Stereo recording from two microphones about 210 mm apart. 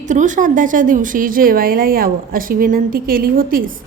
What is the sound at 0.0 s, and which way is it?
A woman's voice, 35° right (ahead or behind).